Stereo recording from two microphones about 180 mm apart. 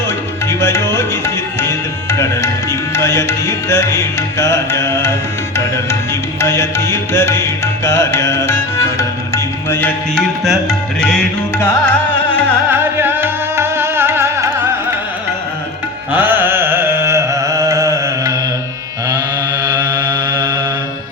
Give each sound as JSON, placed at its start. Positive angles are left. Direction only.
{"t": 0.6, "sound": "music", "side_deg": 15}
{"t": 10.4, "sound": "music", "side_deg": 0}
{"t": 12.7, "sound": "music", "side_deg": -10}
{"t": 16.1, "sound": "carnatic music", "side_deg": -10}
{"t": 19.6, "sound": "mantra", "side_deg": -20}